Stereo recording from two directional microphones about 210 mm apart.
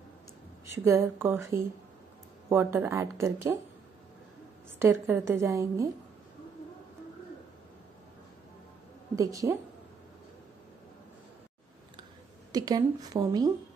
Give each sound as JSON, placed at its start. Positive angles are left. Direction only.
{"t": 0.8, "sound": "a woman's voice", "side_deg": -10}
{"t": 4.7, "sound": "a woman's voice", "side_deg": -10}
{"t": 9.1, "sound": "a woman's voice", "side_deg": -15}
{"t": 12.5, "sound": "a woman's voice", "side_deg": -20}